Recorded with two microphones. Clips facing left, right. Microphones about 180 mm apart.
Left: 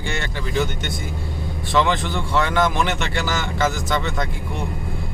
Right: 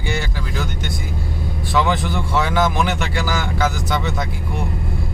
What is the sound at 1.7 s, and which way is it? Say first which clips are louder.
Speech: even; 5° right (ahead or behind).